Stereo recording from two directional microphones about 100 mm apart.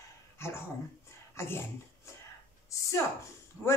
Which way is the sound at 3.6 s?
20° left (ahead or behind).